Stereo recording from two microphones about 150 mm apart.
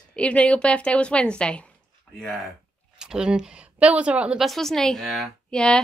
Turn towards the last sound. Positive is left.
turn(degrees=5)  # may be behind; listen again after turning